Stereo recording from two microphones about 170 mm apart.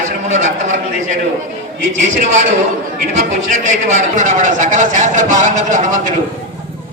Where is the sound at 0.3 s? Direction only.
45° right (ahead or behind).